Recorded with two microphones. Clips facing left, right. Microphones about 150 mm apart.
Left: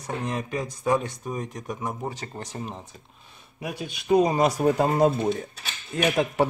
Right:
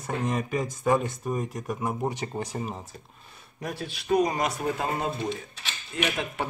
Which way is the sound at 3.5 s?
10° left (ahead or behind).